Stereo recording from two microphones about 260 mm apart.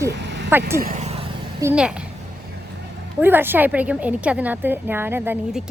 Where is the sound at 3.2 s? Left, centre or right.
Centre.